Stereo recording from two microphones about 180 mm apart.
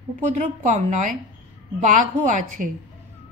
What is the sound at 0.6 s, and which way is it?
Speech, 45° right (ahead or behind).